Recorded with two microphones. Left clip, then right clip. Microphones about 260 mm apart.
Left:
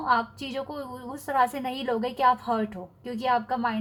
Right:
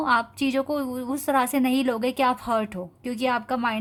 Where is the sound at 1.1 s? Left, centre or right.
Right.